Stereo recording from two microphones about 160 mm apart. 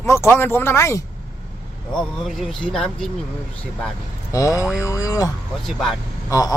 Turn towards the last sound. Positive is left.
turn(degrees=20)  # may be behind; listen again after turning